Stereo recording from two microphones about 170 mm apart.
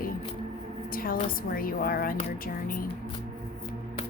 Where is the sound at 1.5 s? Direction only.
60° left (ahead or behind).